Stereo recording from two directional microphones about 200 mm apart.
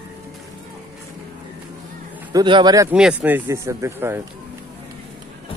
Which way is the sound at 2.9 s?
5° right (ahead or behind).